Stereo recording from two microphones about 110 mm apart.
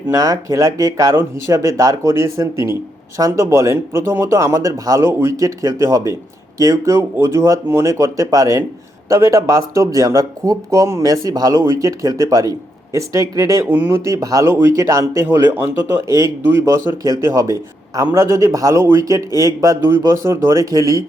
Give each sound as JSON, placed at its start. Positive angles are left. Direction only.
{"t": 0.1, "sound": "speech", "side_deg": -30}
{"t": 13.7, "sound": "speech", "side_deg": -20}